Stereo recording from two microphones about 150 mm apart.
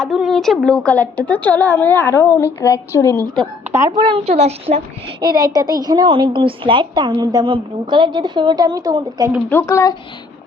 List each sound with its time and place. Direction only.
0.0 s a woman's voice: centre (ahead or behind); by 3.2 s 20° left (ahead or behind)
3.7 s speech: 15° right (ahead or behind)
3.9 s a woman's voice: 40° right (ahead or behind)
5.4 s a woman's voice: 25° right (ahead or behind)
9.5 s speech: 15° left (ahead or behind)